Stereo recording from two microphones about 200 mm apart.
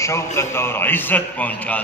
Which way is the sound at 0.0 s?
15° left (ahead or behind).